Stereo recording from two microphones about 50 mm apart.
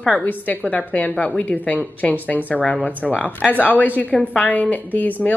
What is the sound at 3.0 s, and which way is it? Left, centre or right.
Speech, left.